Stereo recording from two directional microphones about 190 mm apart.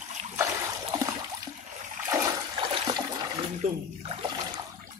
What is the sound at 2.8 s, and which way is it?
Trickle, 20° right (ahead or behind).